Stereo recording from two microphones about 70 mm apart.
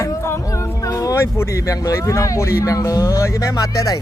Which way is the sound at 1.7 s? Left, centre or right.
Left.